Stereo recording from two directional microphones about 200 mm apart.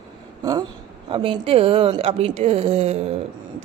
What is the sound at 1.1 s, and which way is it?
A woman's voice, 25° right (ahead or behind).